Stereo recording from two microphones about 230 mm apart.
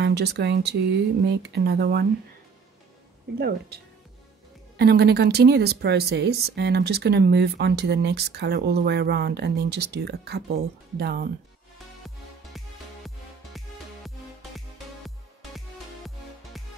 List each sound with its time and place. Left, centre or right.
0.0 s a woman's voice: right
3.3 s a woman's voice: right
12.5 s music: centre
15.0 s music: centre